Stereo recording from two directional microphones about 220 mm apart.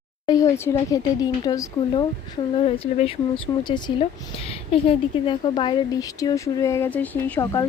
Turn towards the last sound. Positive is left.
turn(degrees=15)  # may be behind; listen again after turning